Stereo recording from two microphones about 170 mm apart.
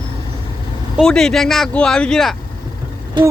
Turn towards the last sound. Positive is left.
turn(degrees=-30)  # may be behind; listen again after turning